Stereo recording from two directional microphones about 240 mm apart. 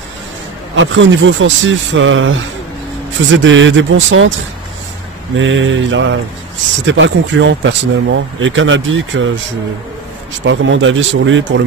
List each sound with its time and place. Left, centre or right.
0.7 s speech: right
5.4 s speech: right
10.4 s speech: right